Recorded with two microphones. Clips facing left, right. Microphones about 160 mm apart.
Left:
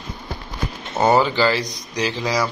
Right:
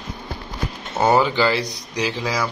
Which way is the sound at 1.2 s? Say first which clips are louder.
Even; 10° right (ahead or behind).